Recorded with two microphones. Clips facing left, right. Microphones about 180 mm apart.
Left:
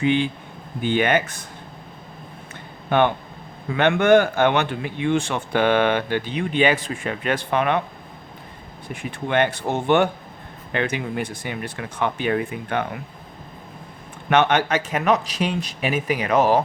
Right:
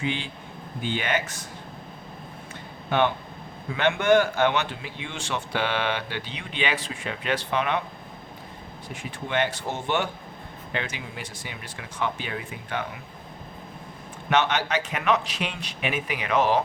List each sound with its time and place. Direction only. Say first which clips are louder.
0.0 s speech: left 10 dB; 60° left (ahead or behind)
2.9 s speech: left 4 dB; 55° left (ahead or behind)
8.9 s speech: left 6 dB; 60° left (ahead or behind)
14.3 s speech: left 5 dB; 55° left (ahead or behind)